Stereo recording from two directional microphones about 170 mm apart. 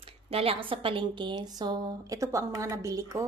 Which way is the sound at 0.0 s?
35° right (ahead or behind).